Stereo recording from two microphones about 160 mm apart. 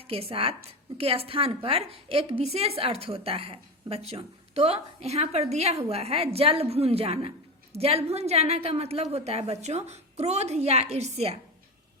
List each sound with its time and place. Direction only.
0.1 s a woman's voice: 35° right (ahead or behind)